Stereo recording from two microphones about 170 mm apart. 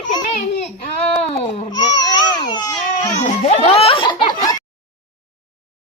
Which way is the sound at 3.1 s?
40° left (ahead or behind).